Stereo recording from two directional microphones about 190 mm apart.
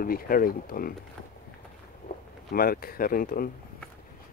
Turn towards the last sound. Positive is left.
turn(degrees=50)  # may be behind; listen again after turning